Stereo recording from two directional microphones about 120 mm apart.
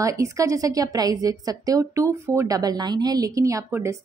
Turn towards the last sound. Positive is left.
turn(degrees=-25)  # may be behind; listen again after turning